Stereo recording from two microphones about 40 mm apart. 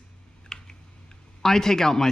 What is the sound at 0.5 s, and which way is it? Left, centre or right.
Typing, centre.